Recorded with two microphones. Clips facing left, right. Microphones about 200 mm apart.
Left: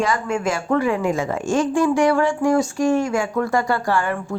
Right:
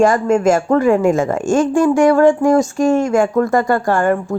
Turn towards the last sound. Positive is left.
turn(degrees=-45)  # may be behind; listen again after turning